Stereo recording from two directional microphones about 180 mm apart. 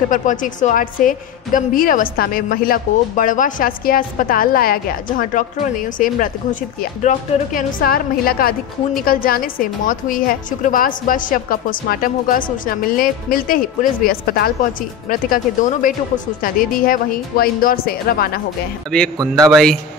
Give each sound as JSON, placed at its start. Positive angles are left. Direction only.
{"t": 0.1, "sound": "a woman's voice", "side_deg": 45}
{"t": 18.9, "sound": "speech", "side_deg": 5}